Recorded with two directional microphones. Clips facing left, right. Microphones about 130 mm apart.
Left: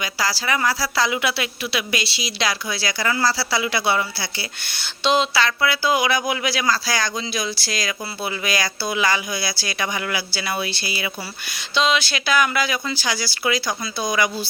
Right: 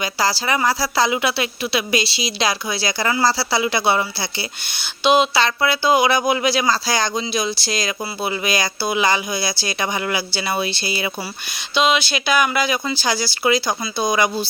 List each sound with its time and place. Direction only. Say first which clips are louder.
0.0 s a woman's voice: right 4 dB; 25° right (ahead or behind)
11.5 s a woman's voice: right 2 dB; 15° right (ahead or behind)